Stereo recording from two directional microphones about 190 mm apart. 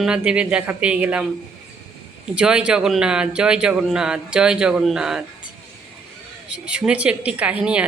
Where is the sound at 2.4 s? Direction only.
5° right (ahead or behind).